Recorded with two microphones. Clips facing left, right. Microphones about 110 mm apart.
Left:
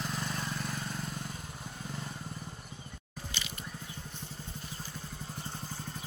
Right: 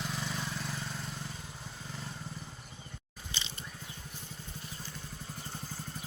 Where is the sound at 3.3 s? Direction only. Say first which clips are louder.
Even; 30° right (ahead or behind).